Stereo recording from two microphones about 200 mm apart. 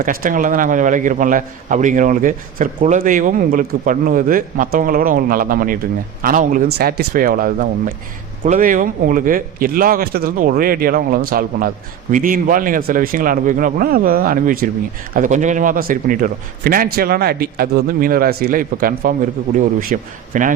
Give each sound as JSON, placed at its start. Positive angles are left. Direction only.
{"t": 0.0, "sound": "a man's voice", "side_deg": -45}